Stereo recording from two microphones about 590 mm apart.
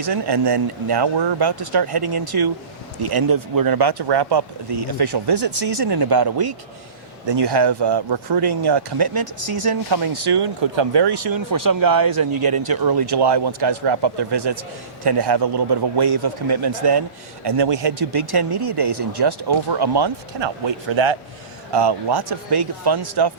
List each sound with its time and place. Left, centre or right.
0.0 s speech: right